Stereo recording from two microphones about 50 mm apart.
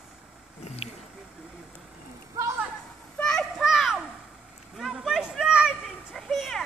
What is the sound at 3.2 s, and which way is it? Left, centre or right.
Children playing, centre.